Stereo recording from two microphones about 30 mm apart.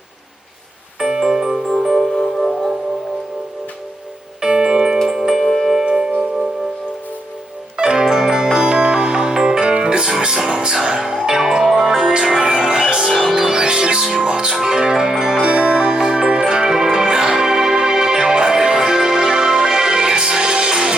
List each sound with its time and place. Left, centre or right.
1.0 s music: right
1.3 s music: centre
4.4 s music: right
5.0 s music: centre
5.4 s music: centre
6.1 s music: centre
7.8 s zither: right
8.1 s music: right; by 12.1 s centre
12.4 s music: right
15.4 s music: right